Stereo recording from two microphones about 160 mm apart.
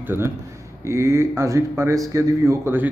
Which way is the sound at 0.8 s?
15° right (ahead or behind).